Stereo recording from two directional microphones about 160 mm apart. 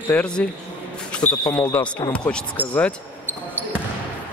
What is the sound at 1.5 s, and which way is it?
Speech, 15° left (ahead or behind).